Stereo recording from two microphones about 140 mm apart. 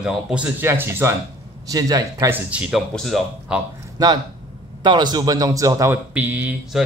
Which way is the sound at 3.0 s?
Centre (ahead or behind).